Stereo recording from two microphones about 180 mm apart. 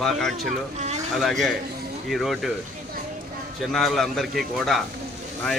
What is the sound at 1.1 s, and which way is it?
A man's voice, centre (ahead or behind).